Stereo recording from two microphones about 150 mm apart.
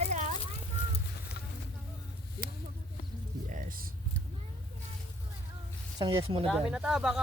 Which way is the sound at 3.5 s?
70° right (ahead or behind).